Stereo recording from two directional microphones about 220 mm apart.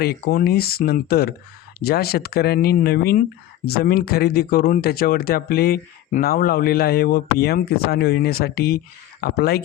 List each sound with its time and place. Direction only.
0.0 s speech: 45° left (ahead or behind)